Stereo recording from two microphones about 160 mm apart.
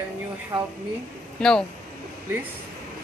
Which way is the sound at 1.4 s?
5° left (ahead or behind).